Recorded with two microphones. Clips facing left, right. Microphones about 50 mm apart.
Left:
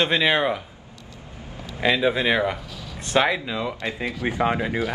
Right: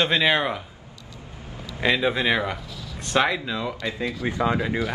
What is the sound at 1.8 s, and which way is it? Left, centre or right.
Speech, centre.